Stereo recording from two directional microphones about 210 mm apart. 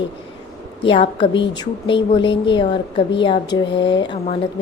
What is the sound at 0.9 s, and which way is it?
A woman's voice, 25° left (ahead or behind).